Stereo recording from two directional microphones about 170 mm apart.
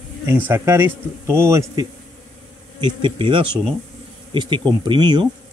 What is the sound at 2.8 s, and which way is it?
Speech, 30° right (ahead or behind).